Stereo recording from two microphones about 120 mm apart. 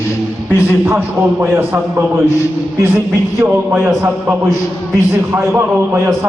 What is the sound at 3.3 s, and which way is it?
Speech, 20° right (ahead or behind).